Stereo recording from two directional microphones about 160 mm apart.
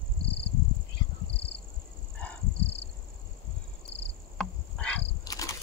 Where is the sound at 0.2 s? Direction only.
90° left.